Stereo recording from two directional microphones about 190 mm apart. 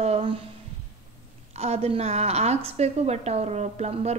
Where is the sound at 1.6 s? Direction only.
35° right (ahead or behind).